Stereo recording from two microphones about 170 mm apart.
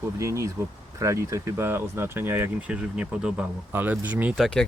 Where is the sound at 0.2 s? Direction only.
15° right (ahead or behind).